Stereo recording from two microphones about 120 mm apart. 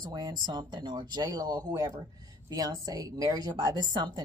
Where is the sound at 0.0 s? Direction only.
35° right (ahead or behind).